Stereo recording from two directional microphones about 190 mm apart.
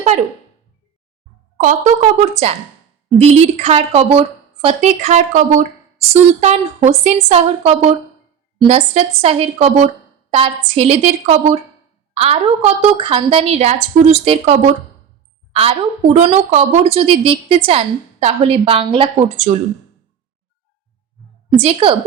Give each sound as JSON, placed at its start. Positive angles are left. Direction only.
{"t": 0.1, "sound": "a woman's voice", "side_deg": -35}
{"t": 1.5, "sound": "a woman's voice", "side_deg": -45}
{"t": 3.2, "sound": "a woman's voice", "side_deg": -35}
{"t": 21.5, "sound": "a woman's voice", "side_deg": -35}